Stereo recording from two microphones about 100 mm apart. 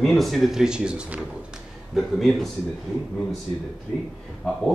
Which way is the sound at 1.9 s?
Centre (ahead or behind).